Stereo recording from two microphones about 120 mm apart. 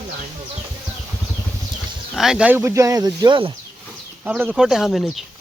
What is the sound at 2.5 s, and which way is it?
Speech, 20° right (ahead or behind).